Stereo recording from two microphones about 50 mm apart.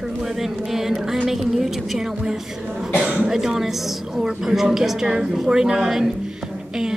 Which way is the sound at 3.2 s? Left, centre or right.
Centre.